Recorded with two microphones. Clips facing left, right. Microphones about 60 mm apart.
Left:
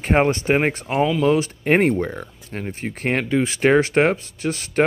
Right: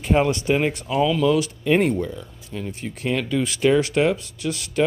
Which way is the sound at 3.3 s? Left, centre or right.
Left.